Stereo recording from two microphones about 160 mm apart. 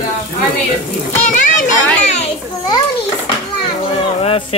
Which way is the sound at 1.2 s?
50° left (ahead or behind).